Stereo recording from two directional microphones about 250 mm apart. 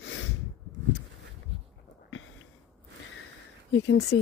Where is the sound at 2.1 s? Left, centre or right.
Left.